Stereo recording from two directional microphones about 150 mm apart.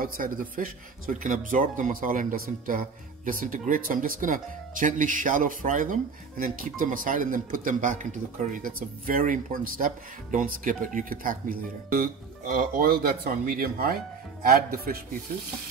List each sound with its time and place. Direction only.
0.0 s speech: 65° right (ahead or behind)